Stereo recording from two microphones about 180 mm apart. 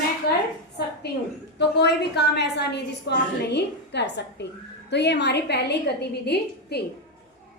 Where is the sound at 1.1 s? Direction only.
65° left (ahead or behind).